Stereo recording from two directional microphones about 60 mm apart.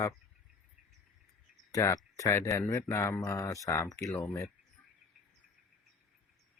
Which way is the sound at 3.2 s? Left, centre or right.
Left.